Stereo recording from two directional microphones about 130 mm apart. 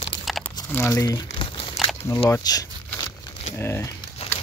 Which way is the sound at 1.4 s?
45° left (ahead or behind).